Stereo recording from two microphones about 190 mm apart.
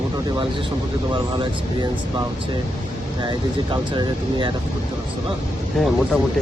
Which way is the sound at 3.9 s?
25° right (ahead or behind).